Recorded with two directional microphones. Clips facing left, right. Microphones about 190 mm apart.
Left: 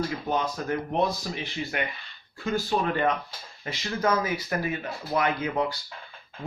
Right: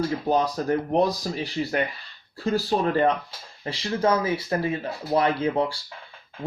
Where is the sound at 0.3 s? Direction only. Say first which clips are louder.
Right 7 dB; 35° right (ahead or behind).